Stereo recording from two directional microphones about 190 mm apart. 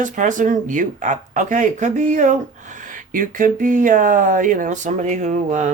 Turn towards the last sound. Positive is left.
turn(degrees=-40)  # may be behind; listen again after turning